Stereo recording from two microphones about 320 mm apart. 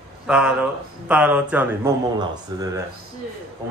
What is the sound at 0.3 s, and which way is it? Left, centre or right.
Speech, centre.